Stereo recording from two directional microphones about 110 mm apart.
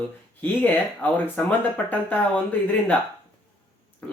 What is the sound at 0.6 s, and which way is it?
Speech, 15° left (ahead or behind).